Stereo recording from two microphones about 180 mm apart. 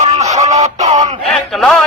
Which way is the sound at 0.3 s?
40° right (ahead or behind).